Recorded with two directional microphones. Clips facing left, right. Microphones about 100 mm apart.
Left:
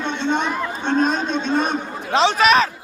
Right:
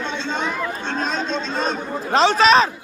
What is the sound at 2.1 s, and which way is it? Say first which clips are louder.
Speech: right 1 dB; 40° right (ahead or behind).